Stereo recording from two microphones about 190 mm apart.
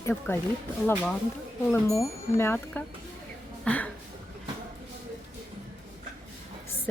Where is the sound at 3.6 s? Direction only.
5° left (ahead or behind).